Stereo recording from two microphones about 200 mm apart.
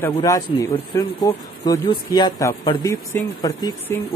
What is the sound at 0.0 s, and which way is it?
A man's voice, 15° left (ahead or behind).